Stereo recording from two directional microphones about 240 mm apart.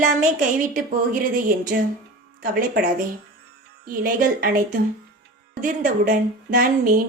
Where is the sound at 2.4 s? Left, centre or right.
Right.